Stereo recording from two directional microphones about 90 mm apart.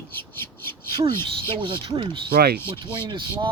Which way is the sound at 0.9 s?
60° right (ahead or behind).